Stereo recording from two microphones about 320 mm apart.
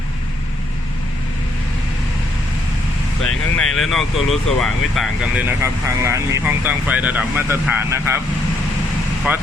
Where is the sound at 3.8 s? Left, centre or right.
Centre.